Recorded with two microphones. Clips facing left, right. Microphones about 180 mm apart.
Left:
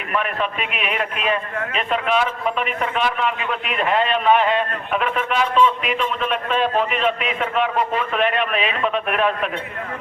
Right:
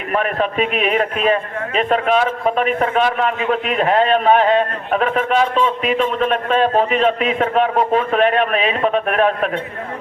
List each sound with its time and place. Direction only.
0.1 s a man's voice: 40° right (ahead or behind)